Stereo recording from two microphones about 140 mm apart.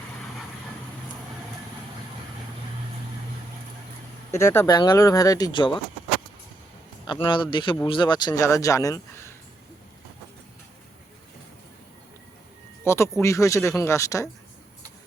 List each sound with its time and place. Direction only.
4.3 s speech: 20° left (ahead or behind)
7.1 s speech: 35° left (ahead or behind)
12.8 s speech: 20° left (ahead or behind)